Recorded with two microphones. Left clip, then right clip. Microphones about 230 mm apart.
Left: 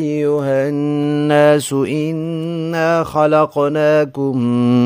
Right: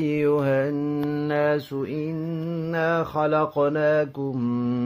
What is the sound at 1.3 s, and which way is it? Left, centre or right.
Mantra, left.